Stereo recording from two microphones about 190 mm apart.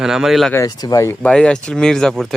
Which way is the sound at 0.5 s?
20° left (ahead or behind).